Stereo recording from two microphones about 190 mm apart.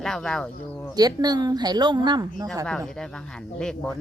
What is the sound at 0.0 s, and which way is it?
Speech, 5° left (ahead or behind).